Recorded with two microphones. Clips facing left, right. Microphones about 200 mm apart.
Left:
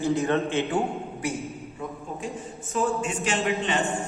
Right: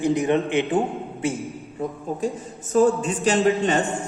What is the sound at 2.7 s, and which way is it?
A man's voice, 35° right (ahead or behind).